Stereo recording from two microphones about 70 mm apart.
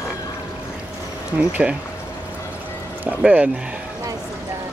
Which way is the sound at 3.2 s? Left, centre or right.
Centre.